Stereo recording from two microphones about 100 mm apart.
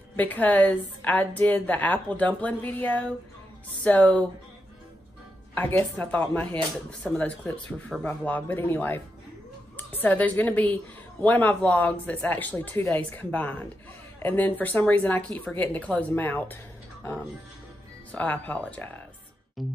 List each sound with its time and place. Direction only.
0.1 s a woman's voice: 15° left (ahead or behind)
5.5 s a woman's voice: 20° left (ahead or behind)
18.1 s a woman's voice: 15° left (ahead or behind)
19.6 s music: centre (ahead or behind)